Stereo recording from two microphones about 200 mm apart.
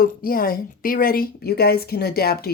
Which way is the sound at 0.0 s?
45° left (ahead or behind).